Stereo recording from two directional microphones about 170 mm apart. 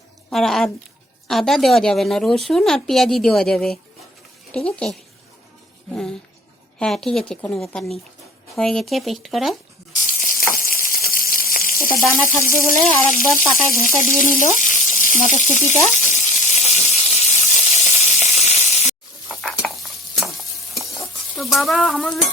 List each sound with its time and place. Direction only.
0.3 s a woman's voice: centre (ahead or behind)
10.0 s frying: 50° left (ahead or behind)
12.5 s speech: 55° left (ahead or behind)
15.9 s a sound: 45° left (ahead or behind)
19.4 s dishes: 5° left (ahead or behind)
20.1 s stir: centre (ahead or behind)